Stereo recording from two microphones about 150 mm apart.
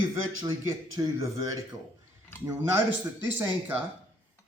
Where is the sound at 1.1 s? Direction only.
20° right (ahead or behind).